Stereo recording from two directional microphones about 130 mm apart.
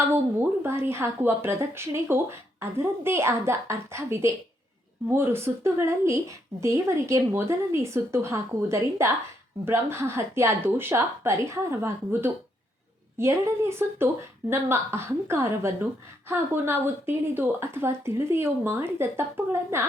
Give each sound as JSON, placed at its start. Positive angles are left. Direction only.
{"t": 0.1, "sound": "a woman's voice", "side_deg": -20}